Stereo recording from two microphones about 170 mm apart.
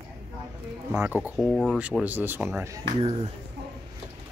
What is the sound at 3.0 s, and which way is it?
Speech, 35° right (ahead or behind).